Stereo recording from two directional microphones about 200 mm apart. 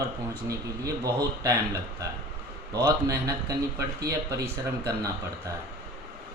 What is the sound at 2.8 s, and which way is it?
Speech, 15° right (ahead or behind).